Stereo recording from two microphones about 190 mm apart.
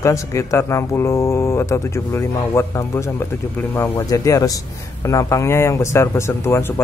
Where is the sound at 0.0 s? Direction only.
15° left (ahead or behind).